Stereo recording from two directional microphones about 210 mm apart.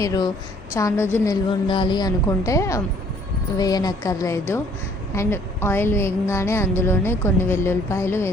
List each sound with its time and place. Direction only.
0.0 s a woman's voice: 15° left (ahead or behind)